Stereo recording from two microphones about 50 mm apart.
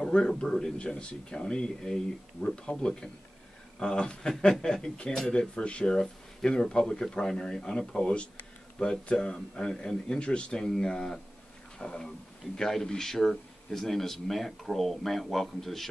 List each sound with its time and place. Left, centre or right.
0.0 s speech: centre
8.7 s a man's voice: centre